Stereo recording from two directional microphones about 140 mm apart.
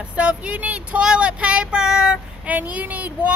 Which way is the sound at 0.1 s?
10° right (ahead or behind).